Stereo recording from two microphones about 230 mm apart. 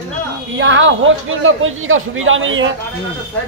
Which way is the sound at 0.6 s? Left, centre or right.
Right.